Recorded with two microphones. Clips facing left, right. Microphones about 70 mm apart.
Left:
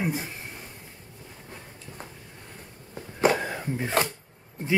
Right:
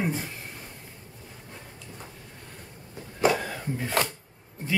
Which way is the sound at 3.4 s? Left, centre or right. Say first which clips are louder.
Left 2 dB; left.